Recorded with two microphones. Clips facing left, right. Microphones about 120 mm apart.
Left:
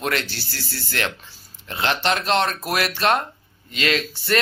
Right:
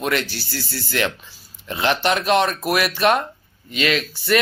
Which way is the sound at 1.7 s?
15° right (ahead or behind).